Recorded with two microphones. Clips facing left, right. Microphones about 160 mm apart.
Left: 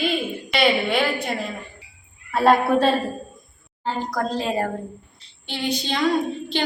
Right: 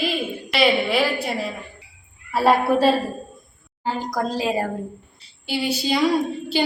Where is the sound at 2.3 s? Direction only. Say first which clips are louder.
Left 1 dB; 5° right (ahead or behind).